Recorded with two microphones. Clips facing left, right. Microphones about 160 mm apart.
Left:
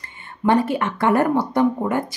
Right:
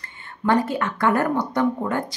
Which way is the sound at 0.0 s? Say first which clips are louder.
Left 4 dB; 20° left (ahead or behind).